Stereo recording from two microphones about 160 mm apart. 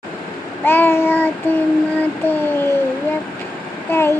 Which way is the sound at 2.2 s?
10° left (ahead or behind).